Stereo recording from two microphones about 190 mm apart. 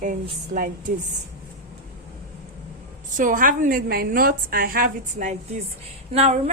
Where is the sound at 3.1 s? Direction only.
45° right (ahead or behind).